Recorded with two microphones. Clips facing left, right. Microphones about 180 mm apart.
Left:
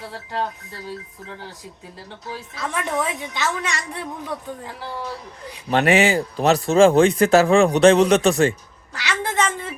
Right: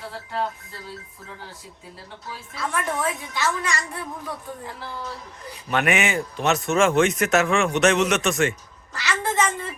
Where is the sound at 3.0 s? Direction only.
20° left (ahead or behind).